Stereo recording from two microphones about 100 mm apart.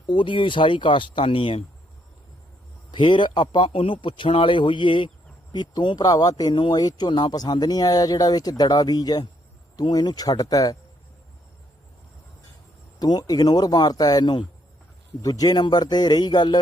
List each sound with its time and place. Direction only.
0.1 s speech: 55° left (ahead or behind)
2.9 s speech: 50° left (ahead or behind)
13.0 s speech: 45° left (ahead or behind)